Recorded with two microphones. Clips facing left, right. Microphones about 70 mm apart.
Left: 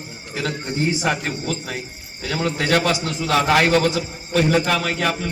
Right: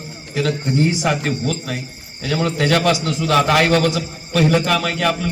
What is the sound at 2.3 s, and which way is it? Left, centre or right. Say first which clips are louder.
A man's voice: right 2 dB; centre.